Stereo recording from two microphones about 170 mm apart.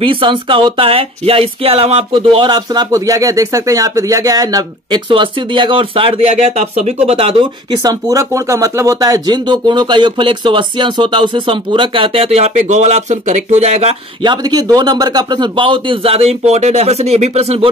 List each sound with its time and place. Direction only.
0.0 s speech: 30° right (ahead or behind)
14.2 s speech: 25° right (ahead or behind)